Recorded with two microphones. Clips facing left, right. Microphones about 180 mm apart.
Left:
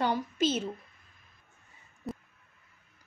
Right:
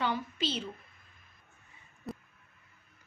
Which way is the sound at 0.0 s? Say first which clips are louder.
Left 5 dB; 45° left (ahead or behind).